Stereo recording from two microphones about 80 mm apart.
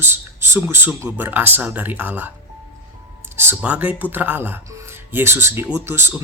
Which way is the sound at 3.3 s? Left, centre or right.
Right.